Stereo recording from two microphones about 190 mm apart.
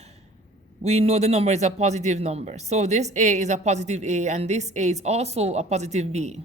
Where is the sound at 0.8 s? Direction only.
35° right (ahead or behind).